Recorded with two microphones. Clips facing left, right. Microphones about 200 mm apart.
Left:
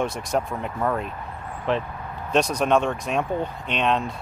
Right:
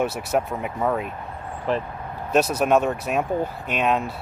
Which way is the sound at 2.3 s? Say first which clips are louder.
Right 1 dB; 5° right (ahead or behind).